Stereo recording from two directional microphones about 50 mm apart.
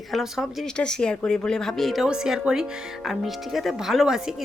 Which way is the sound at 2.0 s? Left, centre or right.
Centre.